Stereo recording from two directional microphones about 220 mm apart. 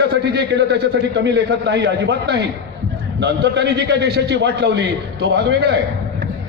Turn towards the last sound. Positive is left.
turn(degrees=-50)  # may be behind; listen again after turning